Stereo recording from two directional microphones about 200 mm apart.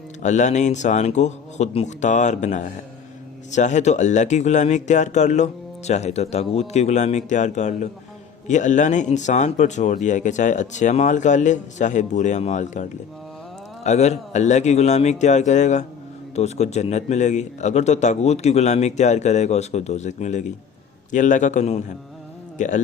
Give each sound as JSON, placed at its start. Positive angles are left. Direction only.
{"t": 0.2, "sound": "speech", "side_deg": 35}
{"t": 13.8, "sound": "speech", "side_deg": 35}